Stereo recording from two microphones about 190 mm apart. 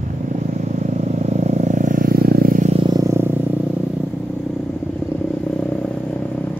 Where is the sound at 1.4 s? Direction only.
40° right (ahead or behind).